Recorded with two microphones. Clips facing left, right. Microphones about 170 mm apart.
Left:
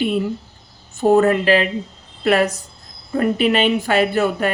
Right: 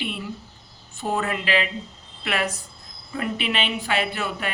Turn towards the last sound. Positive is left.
turn(degrees=45)  # may be behind; listen again after turning